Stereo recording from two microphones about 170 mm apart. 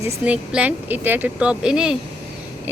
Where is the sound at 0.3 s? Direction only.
10° right (ahead or behind).